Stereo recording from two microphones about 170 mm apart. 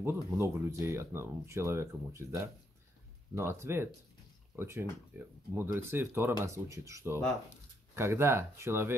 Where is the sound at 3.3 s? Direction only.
15° right (ahead or behind).